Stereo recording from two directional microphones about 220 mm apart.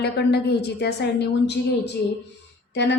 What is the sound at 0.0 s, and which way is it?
A woman's voice, 50° left (ahead or behind).